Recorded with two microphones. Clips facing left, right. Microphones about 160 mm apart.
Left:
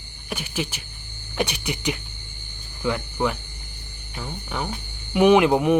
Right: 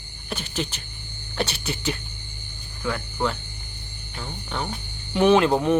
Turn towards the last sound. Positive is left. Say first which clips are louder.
# left 2 dB
turn(degrees=10)  # may be behind; listen again after turning